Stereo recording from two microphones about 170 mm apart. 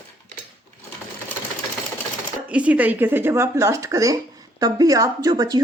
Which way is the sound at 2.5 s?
10° right (ahead or behind).